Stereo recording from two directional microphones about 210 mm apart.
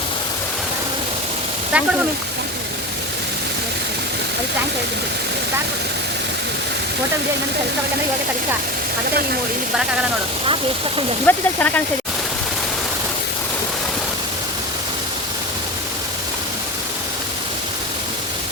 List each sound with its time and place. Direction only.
1.7 s speech: 5° right (ahead or behind)
10.4 s speech: 25° right (ahead or behind)
11.3 s speech: 10° left (ahead or behind)